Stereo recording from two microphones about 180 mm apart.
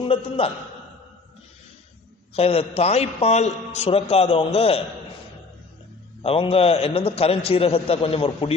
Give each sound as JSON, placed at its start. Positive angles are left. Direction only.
{"t": 0.0, "sound": "a man's voice", "side_deg": 30}
{"t": 2.3, "sound": "a man's voice", "side_deg": 35}
{"t": 6.2, "sound": "a man's voice", "side_deg": 30}